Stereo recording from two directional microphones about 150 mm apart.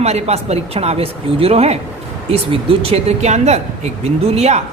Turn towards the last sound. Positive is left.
turn(degrees=-45)  # may be behind; listen again after turning